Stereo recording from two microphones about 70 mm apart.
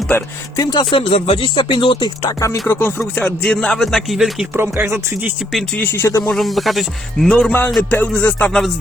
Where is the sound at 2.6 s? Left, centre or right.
Left.